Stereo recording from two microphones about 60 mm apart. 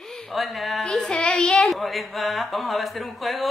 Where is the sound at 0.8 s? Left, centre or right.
Centre.